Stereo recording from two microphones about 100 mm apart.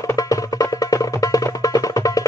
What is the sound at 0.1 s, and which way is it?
Music, 35° left (ahead or behind).